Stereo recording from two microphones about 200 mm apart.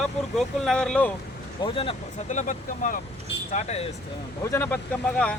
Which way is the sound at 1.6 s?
25° left (ahead or behind).